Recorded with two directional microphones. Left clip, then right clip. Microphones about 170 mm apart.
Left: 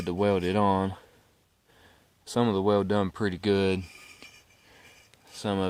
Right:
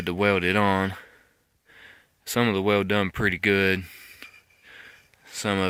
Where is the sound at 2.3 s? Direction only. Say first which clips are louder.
Right 2 dB; 45° right (ahead or behind).